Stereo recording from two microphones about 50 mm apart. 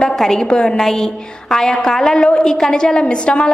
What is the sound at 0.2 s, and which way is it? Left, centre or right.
A woman's voice, centre.